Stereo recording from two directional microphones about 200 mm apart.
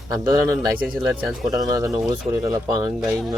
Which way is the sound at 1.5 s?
15° right (ahead or behind).